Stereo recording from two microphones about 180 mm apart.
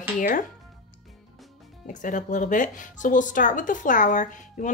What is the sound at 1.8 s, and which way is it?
Speech, 45° left (ahead or behind).